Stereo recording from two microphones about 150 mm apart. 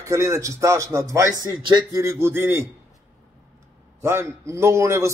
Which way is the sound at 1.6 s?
30° right (ahead or behind).